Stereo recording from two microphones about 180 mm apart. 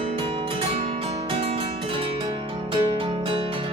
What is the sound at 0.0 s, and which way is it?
Guitar, 30° right (ahead or behind).